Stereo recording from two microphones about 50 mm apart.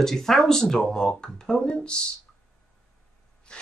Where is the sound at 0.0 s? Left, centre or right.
Centre.